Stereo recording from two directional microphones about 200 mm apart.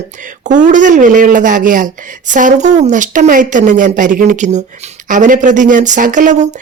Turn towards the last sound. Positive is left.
turn(degrees=-40)  # may be behind; listen again after turning